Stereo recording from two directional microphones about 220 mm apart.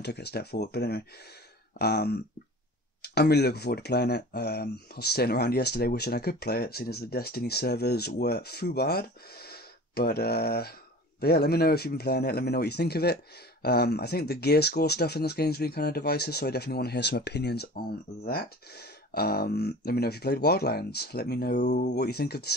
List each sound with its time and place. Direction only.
0.0 s speech: 50° left (ahead or behind)
21.9 s speech: 45° left (ahead or behind)